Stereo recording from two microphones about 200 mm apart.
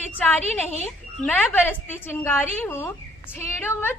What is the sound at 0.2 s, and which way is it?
A woman's voice, 10° left (ahead or behind).